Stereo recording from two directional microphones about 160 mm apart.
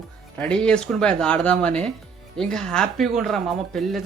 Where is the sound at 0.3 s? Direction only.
5° left (ahead or behind).